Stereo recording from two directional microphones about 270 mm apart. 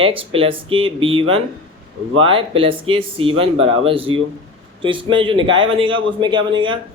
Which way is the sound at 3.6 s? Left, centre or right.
Right.